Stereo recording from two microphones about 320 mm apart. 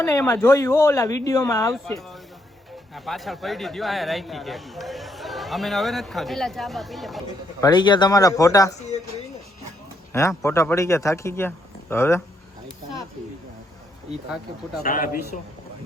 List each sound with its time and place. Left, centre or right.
0.0 s a man's voice: centre
7.6 s speech: centre
8.9 s a sound: left
10.1 s speech: centre
14.8 s a man's voice: left